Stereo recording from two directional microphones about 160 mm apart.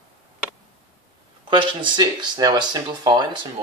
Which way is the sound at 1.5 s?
30° right (ahead or behind).